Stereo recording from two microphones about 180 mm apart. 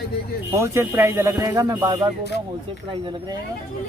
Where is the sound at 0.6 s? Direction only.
15° right (ahead or behind).